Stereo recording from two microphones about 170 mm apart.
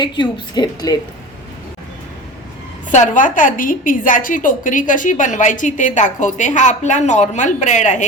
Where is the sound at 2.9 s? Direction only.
45° left (ahead or behind).